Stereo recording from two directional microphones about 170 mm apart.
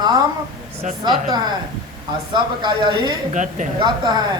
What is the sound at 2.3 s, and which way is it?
Speech, 25° right (ahead or behind).